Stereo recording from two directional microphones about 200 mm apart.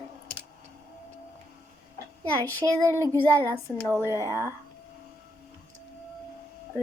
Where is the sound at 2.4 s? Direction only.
10° left (ahead or behind).